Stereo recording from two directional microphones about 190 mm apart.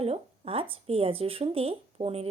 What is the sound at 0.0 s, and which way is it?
Speech, 30° right (ahead or behind).